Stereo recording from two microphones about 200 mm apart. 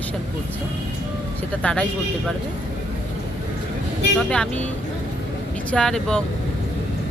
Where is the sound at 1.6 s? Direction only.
5° left (ahead or behind).